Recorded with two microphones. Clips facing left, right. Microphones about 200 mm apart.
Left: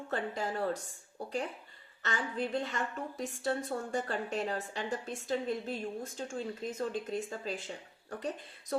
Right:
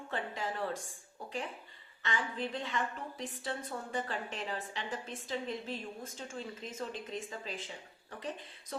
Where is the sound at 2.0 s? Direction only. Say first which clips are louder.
Left 2 dB; 40° left (ahead or behind).